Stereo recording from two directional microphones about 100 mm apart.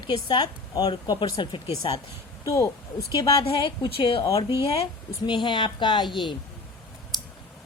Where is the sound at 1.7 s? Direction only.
45° left (ahead or behind).